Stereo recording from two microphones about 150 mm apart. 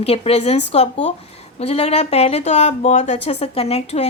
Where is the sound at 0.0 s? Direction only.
40° left (ahead or behind).